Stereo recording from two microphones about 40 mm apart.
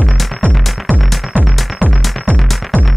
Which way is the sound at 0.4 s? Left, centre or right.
Right.